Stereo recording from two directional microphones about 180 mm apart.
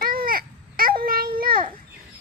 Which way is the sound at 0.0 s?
55° right (ahead or behind).